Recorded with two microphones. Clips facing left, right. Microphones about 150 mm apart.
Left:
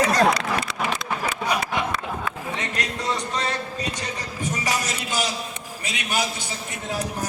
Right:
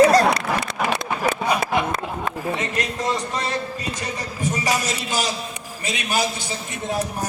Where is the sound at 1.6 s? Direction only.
40° right (ahead or behind).